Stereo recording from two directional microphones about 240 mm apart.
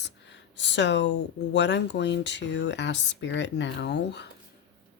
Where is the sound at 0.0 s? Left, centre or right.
Left.